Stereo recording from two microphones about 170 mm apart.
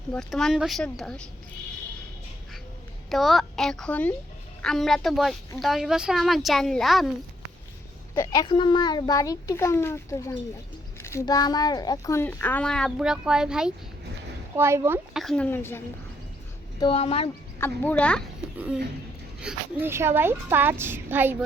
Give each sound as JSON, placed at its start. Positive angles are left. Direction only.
{"t": 0.1, "sound": "speech", "side_deg": 5}
{"t": 3.1, "sound": "speech", "side_deg": 0}
{"t": 8.1, "sound": "a child's voice", "side_deg": 20}
{"t": 14.5, "sound": "a woman's voice", "side_deg": -15}
{"t": 15.1, "sound": "speech", "side_deg": 0}
{"t": 16.8, "sound": "speech", "side_deg": 35}
{"t": 17.6, "sound": "speech", "side_deg": 10}
{"t": 19.4, "sound": "a woman's voice", "side_deg": -10}